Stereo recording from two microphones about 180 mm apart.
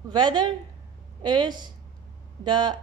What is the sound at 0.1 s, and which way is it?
Speech, 25° right (ahead or behind).